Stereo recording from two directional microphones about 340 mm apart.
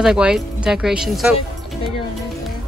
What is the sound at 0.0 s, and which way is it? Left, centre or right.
A woman's voice, centre.